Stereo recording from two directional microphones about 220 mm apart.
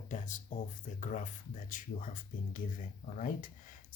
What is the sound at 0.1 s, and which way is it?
Speech, 35° left (ahead or behind).